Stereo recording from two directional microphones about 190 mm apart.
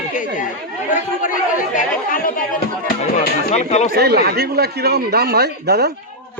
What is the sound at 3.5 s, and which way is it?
Speech, 35° left (ahead or behind).